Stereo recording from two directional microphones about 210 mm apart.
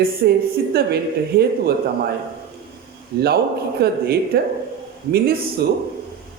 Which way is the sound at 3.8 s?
50° right (ahead or behind).